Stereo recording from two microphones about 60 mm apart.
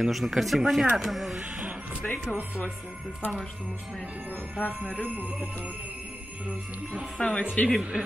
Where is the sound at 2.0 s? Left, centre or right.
Centre.